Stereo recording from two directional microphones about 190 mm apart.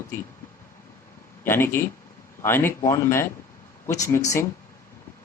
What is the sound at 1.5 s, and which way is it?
Speech, 10° left (ahead or behind).